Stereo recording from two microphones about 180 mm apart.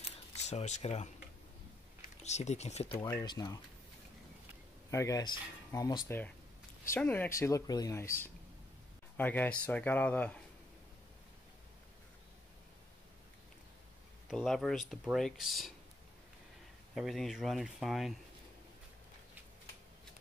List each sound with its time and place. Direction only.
0.0 s camera: 40° left (ahead or behind)
2.0 s speech: 40° left (ahead or behind)
3.1 s speech: 20° left (ahead or behind)
4.9 s speech: 20° left (ahead or behind)
14.3 s speech: centre (ahead or behind)
16.9 s speech: centre (ahead or behind)